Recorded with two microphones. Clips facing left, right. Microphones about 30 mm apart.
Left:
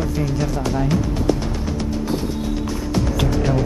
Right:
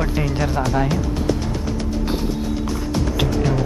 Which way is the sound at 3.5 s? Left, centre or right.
Centre.